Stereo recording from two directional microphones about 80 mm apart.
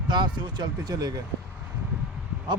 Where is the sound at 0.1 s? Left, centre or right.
Right.